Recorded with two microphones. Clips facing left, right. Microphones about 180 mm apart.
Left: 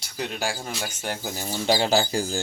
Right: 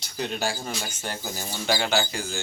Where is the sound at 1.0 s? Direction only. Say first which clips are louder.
Left 3 dB; 15° left (ahead or behind).